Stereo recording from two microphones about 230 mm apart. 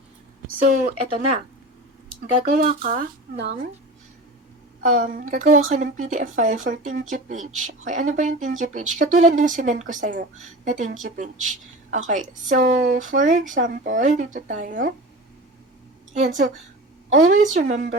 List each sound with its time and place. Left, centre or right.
0.6 s a woman's voice: right
2.4 s a woman's voice: right
4.9 s a woman's voice: right
16.1 s a woman's voice: right